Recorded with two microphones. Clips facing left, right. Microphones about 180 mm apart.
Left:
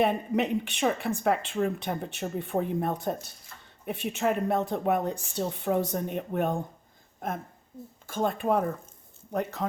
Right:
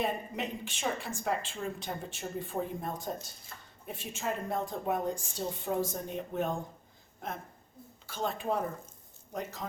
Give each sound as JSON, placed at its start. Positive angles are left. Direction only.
{"t": 0.0, "sound": "a woman's voice", "side_deg": 65}
{"t": 8.0, "sound": "speech", "side_deg": 50}